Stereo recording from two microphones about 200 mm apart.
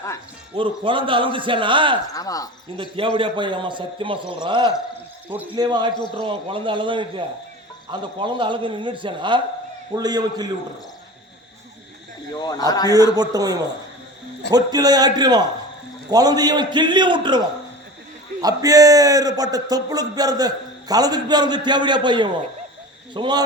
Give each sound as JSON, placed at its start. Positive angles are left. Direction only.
{"t": 0.5, "sound": "a man's voice", "side_deg": -25}
{"t": 2.1, "sound": "speech", "side_deg": 15}
{"t": 2.7, "sound": "a man's voice", "side_deg": -25}
{"t": 12.3, "sound": "speech", "side_deg": 20}
{"t": 13.1, "sound": "a man's voice", "side_deg": -20}